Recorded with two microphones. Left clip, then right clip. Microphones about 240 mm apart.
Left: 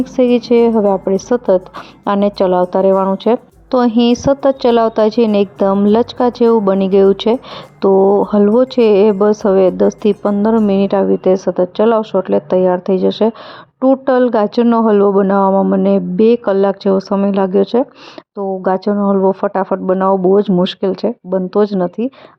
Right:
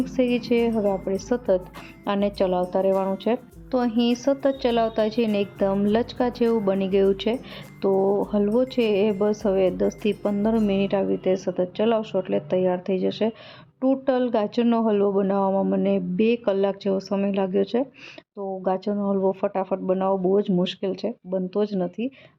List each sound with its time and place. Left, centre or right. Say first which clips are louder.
0.0 s speech: left 11 dB; left